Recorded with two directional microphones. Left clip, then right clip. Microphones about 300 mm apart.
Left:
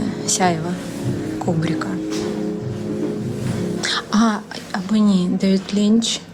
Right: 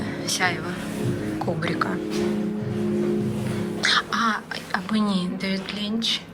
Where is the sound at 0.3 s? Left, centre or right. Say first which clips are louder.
Left 5 dB; centre.